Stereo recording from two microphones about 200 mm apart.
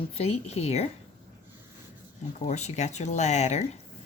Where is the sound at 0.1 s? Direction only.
30° left (ahead or behind).